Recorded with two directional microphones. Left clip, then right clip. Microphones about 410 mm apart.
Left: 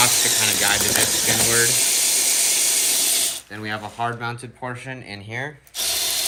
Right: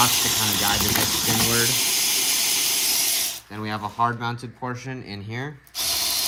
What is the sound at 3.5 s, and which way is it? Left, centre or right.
Speech, centre.